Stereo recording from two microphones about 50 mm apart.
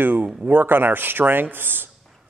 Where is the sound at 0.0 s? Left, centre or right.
Right.